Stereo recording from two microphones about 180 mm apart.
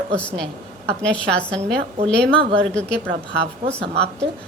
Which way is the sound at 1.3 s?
5° left (ahead or behind).